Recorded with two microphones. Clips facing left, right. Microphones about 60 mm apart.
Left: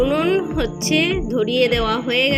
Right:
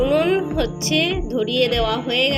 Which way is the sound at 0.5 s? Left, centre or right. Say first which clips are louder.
Left 1 dB; left.